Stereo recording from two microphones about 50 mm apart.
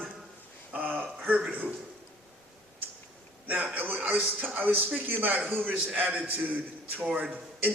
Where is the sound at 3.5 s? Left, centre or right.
Right.